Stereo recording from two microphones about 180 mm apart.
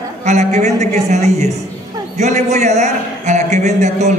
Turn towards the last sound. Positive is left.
turn(degrees=-40)  # may be behind; listen again after turning